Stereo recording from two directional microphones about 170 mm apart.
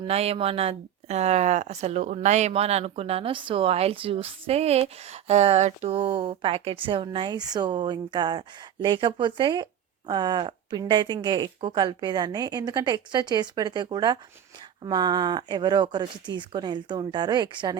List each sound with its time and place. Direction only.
0.1 s a woman's voice: 35° right (ahead or behind)